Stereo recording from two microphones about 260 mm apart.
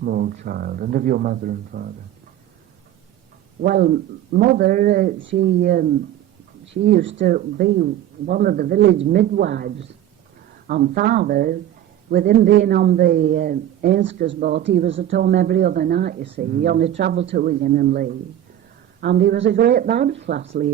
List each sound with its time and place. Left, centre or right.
0.0 s speech: right
3.6 s speech: right
5.2 s speech: right